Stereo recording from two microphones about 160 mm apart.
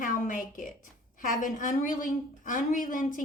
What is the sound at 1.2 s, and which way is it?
A woman's voice, 55° left (ahead or behind).